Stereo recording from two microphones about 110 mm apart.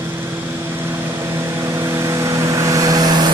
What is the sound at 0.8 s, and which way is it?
Vehicle, 25° right (ahead or behind).